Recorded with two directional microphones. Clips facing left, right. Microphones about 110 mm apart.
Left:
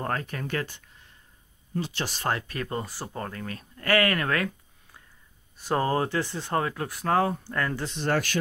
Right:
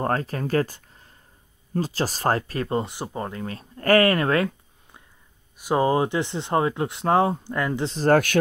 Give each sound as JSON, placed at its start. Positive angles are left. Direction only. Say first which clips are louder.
{"t": 0.0, "sound": "speech", "louder": "right 6 dB", "side_deg": -35}
{"t": 5.6, "sound": "speech", "louder": "right 5 dB", "side_deg": -15}
{"t": 7.8, "sound": "speech", "louder": "right 12 dB", "side_deg": -35}